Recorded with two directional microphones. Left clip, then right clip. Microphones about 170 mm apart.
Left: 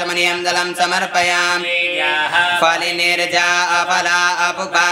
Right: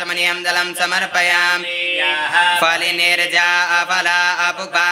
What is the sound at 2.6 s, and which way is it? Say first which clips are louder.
Mantra: even; centre (ahead or behind).